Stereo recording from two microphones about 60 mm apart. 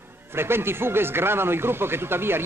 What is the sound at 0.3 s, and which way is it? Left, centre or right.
Speech, right.